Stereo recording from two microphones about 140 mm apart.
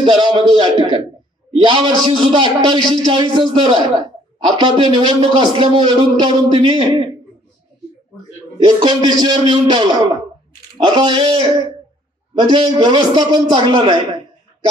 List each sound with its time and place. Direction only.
0.0 s a man's voice: 35° right (ahead or behind)
8.5 s a man's voice: 35° right (ahead or behind)